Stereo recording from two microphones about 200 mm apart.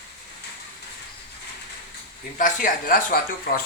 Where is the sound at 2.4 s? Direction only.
40° left (ahead or behind).